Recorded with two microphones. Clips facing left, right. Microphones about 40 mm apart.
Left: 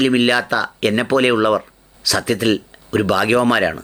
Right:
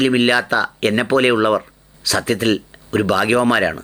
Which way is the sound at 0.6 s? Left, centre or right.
Right.